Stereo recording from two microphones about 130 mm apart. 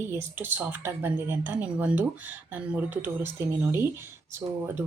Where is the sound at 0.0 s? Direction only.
15° right (ahead or behind).